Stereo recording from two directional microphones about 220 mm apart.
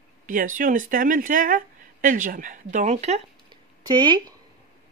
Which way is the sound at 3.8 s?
20° right (ahead or behind).